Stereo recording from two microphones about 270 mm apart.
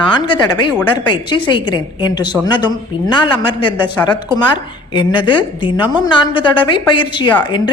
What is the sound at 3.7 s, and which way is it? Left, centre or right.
Speech, centre.